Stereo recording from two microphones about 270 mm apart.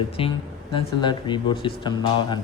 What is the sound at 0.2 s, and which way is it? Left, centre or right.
Speech, centre.